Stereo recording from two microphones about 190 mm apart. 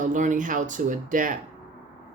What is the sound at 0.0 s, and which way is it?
Speech, 40° right (ahead or behind).